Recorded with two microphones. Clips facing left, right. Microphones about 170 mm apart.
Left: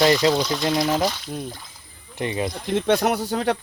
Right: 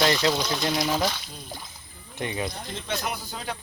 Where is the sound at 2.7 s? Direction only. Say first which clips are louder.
Left 15 dB; 70° left (ahead or behind).